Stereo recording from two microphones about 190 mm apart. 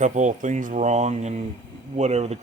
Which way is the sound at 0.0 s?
40° right (ahead or behind).